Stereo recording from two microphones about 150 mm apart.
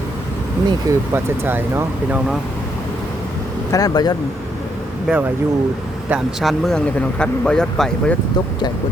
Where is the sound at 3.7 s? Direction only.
25° left (ahead or behind).